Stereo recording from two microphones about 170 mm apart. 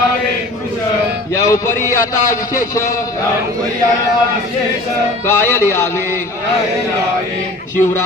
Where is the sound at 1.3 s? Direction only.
15° left (ahead or behind).